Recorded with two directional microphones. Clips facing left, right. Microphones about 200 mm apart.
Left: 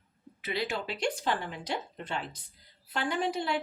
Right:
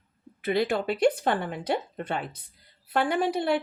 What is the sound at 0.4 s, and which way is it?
Speech, 50° right (ahead or behind).